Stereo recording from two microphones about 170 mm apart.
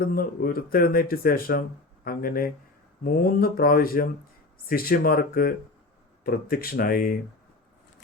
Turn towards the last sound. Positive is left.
turn(degrees=55)  # may be behind; listen again after turning